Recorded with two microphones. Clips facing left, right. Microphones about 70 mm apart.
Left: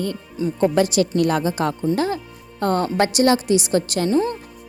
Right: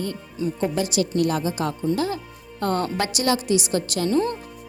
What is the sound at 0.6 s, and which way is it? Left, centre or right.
A woman's voice, left.